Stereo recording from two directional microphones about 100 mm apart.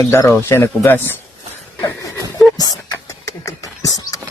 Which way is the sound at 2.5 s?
40° left (ahead or behind).